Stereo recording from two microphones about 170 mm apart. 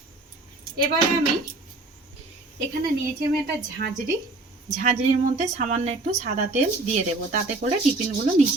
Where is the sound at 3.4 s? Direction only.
65° right (ahead or behind).